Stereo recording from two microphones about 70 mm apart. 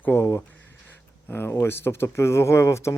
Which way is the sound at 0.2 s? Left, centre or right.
Left.